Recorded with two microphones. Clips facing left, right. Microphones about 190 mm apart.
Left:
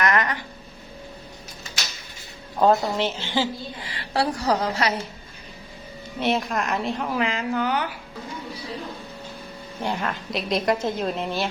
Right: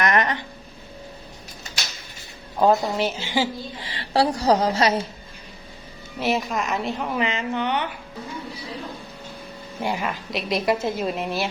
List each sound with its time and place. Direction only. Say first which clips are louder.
0.0 s a sound: right 1 dB; 20° right (ahead or behind)
2.6 s speech: even; 10° right (ahead or behind)
3.9 s a woman's voice: right 4 dB; 30° right (ahead or behind)
6.1 s a woman's voice: even; centre (ahead or behind)
9.8 s a woman's voice: right 1 dB; 10° right (ahead or behind)